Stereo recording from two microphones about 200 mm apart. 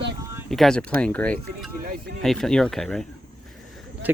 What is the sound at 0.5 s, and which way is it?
Speech, centre (ahead or behind).